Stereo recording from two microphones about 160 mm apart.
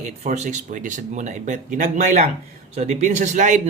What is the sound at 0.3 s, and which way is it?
Speech, 50° right (ahead or behind).